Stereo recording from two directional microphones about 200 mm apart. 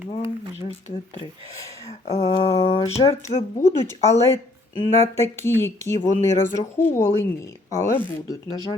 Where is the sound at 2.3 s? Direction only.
30° left (ahead or behind).